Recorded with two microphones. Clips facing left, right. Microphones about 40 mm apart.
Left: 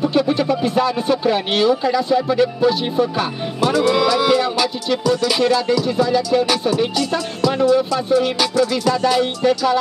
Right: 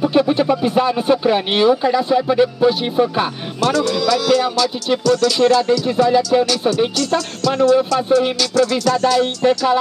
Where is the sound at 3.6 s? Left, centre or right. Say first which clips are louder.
Left 1 dB; centre.